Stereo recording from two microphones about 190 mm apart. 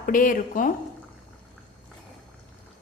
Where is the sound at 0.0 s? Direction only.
45° left (ahead or behind).